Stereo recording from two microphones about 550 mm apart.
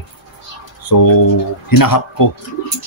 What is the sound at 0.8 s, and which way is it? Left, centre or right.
Speech, left.